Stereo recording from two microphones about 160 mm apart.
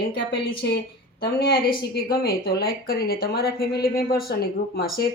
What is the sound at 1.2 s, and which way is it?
Speech, 75° left (ahead or behind).